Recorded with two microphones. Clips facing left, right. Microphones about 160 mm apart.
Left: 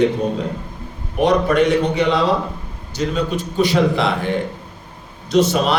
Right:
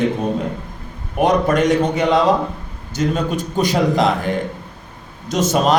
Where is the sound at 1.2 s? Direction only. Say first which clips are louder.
Even; 45° right (ahead or behind).